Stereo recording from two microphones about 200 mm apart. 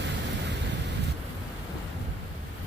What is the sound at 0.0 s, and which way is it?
Vehicle, 60° right (ahead or behind).